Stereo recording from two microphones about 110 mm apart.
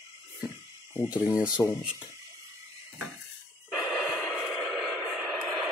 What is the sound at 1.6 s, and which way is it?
Speech, 35° left (ahead or behind).